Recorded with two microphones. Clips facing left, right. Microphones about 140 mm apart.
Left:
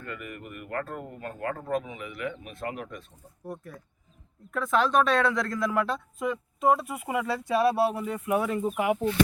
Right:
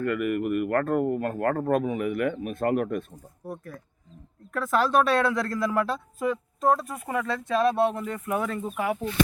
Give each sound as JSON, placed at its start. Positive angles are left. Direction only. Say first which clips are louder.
{"t": 0.0, "sound": "speech", "louder": "right 14 dB", "side_deg": -65}
{"t": 3.4, "sound": "speech", "louder": "right 1 dB", "side_deg": 0}